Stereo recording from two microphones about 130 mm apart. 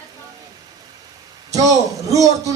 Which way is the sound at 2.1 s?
25° right (ahead or behind).